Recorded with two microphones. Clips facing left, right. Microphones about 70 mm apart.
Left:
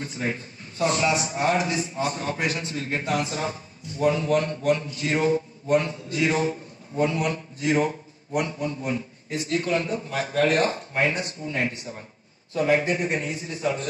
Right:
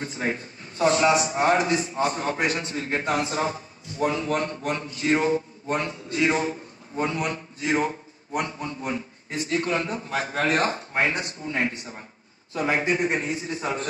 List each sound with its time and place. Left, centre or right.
0.0 s a man's voice: right